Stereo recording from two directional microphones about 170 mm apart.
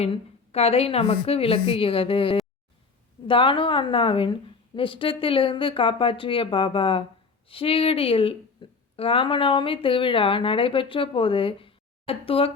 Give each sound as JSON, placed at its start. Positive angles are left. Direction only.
{"t": 0.0, "sound": "a woman's voice", "side_deg": 35}
{"t": 8.6, "sound": "a sound", "side_deg": 30}
{"t": 9.0, "sound": "a woman's voice", "side_deg": 35}